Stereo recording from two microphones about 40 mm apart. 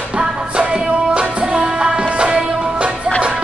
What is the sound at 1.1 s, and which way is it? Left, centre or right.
Music, right.